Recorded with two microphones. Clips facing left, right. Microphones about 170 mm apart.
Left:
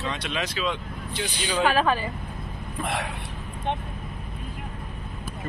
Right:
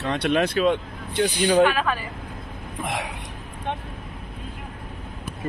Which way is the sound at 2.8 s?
15° right (ahead or behind).